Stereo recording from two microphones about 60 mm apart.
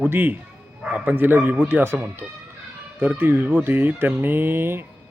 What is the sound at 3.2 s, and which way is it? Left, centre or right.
Speech, right.